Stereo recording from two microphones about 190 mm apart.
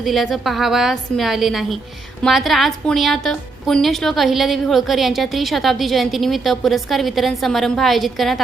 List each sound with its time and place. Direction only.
0.0 s a woman's voice: centre (ahead or behind)